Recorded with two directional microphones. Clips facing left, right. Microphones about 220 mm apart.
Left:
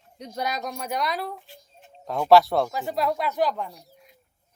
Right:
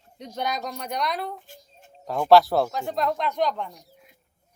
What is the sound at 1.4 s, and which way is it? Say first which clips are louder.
Child singing: right 1 dB; 45° right (ahead or behind).